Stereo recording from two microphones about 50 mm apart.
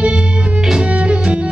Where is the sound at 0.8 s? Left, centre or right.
Right.